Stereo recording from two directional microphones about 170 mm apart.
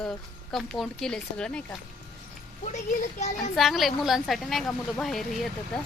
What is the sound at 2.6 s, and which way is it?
Speech, 45° left (ahead or behind).